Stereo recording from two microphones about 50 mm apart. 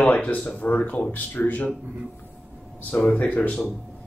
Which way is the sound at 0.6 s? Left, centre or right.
Left.